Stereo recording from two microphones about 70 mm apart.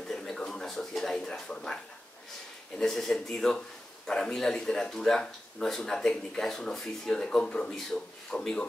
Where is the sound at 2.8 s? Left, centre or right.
Centre.